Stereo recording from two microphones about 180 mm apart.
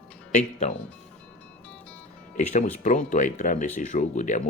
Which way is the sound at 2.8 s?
40° left (ahead or behind).